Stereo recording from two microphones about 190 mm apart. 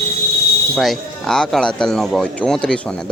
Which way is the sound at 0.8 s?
Centre (ahead or behind).